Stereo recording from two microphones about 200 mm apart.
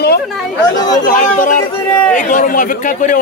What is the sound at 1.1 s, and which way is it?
A man's voice, 40° left (ahead or behind).